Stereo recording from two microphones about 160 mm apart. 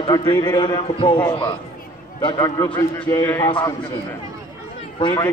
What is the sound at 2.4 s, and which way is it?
A man's voice, 20° left (ahead or behind).